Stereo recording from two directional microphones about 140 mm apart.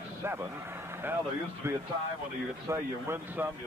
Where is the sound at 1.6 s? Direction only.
20° right (ahead or behind).